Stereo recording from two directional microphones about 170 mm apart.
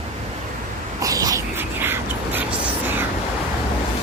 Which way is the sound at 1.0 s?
20° right (ahead or behind).